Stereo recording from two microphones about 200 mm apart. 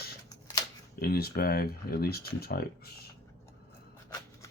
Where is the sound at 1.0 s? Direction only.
50° left (ahead or behind).